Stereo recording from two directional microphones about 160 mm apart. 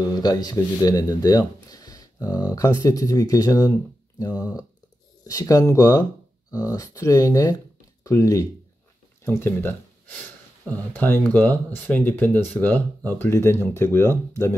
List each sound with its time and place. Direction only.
0.1 s speech: 25° left (ahead or behind)